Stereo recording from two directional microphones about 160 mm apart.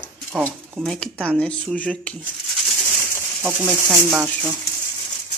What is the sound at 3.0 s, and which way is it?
Bird, 15° left (ahead or behind).